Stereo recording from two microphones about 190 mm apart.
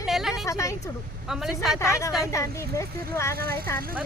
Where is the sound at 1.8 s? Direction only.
15° left (ahead or behind).